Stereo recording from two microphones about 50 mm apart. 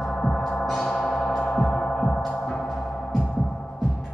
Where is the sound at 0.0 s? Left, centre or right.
Centre.